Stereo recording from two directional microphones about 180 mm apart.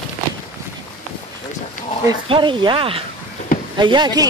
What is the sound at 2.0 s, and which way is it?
Speech, 25° right (ahead or behind).